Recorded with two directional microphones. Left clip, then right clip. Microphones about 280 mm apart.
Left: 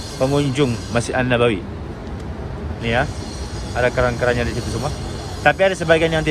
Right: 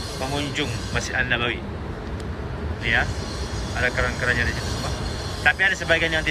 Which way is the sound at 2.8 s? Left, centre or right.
Centre.